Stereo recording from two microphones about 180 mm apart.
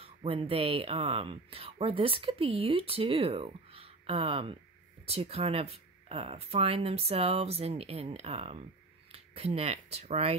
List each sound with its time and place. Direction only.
0.0 s speech: 30° right (ahead or behind)